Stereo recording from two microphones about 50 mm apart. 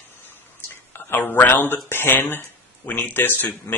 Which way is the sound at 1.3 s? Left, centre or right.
Left.